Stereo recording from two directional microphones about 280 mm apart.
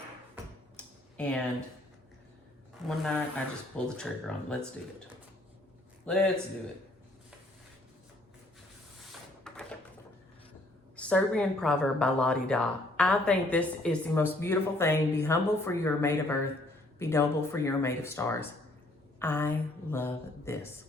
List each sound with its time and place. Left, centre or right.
1.1 s speech: centre
2.8 s a woman's voice: centre
6.1 s a woman's voice: centre
9.5 s a sound: centre
10.9 s a woman's voice: centre